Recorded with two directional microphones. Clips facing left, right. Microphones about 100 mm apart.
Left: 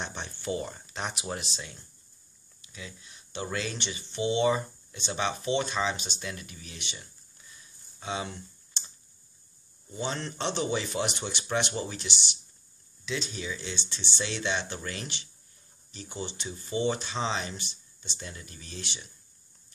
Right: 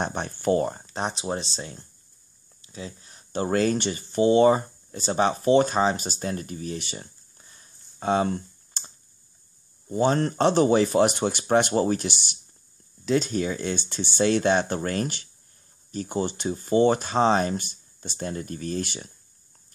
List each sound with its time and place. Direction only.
0.0 s speech: 50° right (ahead or behind)